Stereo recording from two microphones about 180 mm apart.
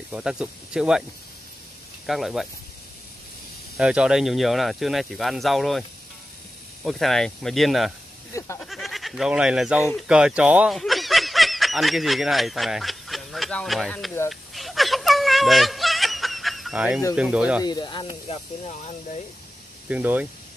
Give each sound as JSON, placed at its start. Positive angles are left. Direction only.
{"t": 0.1, "sound": "speech", "side_deg": -5}
{"t": 2.0, "sound": "speech", "side_deg": 0}
{"t": 3.7, "sound": "speech", "side_deg": -5}
{"t": 8.3, "sound": "a sound", "side_deg": 15}
{"t": 8.5, "sound": "speech", "side_deg": 0}
{"t": 14.3, "sound": "a sound", "side_deg": 0}
{"t": 17.1, "sound": "speech", "side_deg": -5}
{"t": 17.6, "sound": "speech", "side_deg": 25}
{"t": 19.9, "sound": "speech", "side_deg": -10}